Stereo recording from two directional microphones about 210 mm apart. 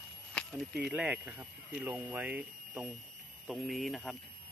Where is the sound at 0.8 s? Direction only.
5° right (ahead or behind).